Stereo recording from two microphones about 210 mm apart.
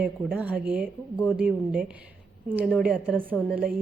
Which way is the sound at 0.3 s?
5° right (ahead or behind).